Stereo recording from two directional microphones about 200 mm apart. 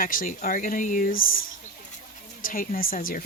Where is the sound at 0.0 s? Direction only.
45° left (ahead or behind).